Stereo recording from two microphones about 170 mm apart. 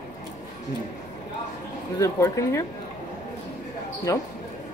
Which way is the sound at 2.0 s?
15° left (ahead or behind).